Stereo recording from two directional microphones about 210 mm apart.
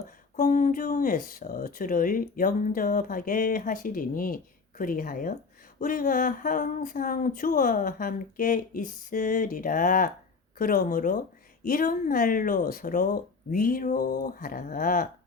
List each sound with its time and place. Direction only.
0.3 s speech: 35° left (ahead or behind)